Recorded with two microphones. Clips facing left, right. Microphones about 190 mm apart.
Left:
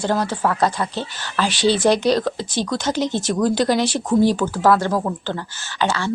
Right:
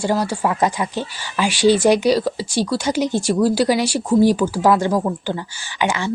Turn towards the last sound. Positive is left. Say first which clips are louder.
# right 1 dB
turn(degrees=-15)  # may be behind; listen again after turning